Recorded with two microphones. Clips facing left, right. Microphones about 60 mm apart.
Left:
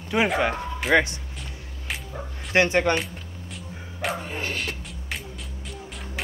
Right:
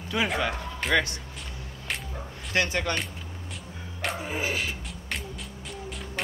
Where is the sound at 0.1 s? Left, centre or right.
Left.